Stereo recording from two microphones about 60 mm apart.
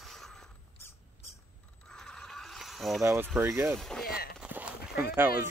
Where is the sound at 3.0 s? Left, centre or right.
Right.